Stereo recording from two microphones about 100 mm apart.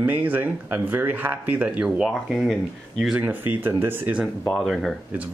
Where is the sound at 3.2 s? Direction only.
20° right (ahead or behind).